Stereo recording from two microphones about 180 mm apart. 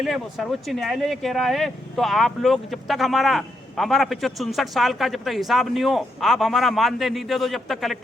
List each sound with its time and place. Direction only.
0.0 s speech: centre (ahead or behind)